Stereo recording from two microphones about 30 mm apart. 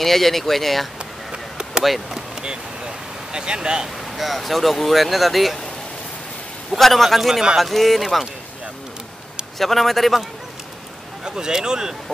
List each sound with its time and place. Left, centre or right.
0.0 s speech: centre
1.3 s chop: right
2.0 s vehicle: right
3.3 s speech: right
3.8 s speech: centre
6.7 s speech: centre
7.2 s speech: centre
9.6 s speech: centre
11.2 s speech: right